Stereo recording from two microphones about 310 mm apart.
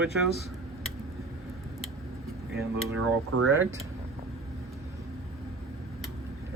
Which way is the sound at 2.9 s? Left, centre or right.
Right.